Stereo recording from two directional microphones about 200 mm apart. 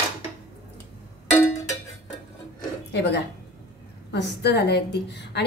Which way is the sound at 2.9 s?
55° left (ahead or behind).